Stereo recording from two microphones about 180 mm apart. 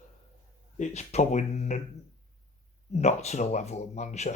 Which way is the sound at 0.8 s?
40° left (ahead or behind).